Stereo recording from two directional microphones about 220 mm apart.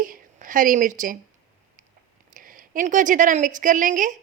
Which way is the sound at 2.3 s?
40° right (ahead or behind).